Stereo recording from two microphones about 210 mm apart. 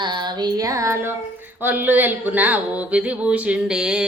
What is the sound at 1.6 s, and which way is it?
A woman's voice, 10° right (ahead or behind).